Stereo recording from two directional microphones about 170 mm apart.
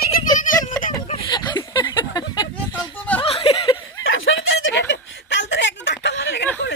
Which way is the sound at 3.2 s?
35° left (ahead or behind).